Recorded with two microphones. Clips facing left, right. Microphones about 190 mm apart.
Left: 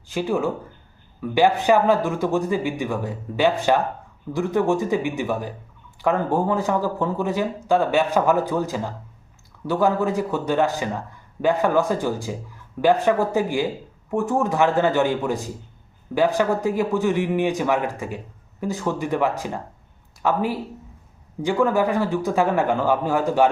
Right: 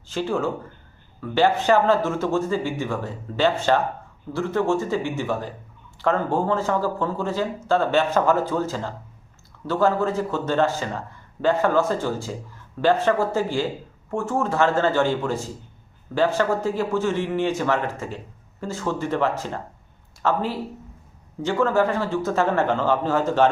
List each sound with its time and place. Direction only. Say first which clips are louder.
0.1 s speech: left 1 dB; 15° left (ahead or behind)